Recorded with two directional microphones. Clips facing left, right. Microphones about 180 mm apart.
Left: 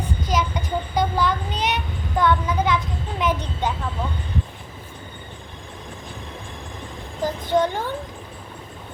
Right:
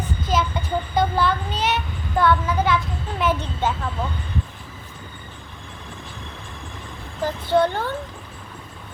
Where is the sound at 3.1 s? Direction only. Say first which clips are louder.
Right 1 dB; 15° left (ahead or behind).